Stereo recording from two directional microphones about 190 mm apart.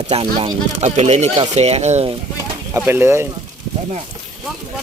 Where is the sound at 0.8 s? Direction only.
35° right (ahead or behind).